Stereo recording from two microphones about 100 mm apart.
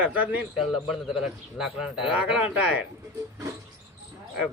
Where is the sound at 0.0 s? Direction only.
15° right (ahead or behind).